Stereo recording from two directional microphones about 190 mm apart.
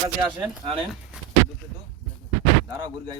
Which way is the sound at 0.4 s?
30° right (ahead or behind).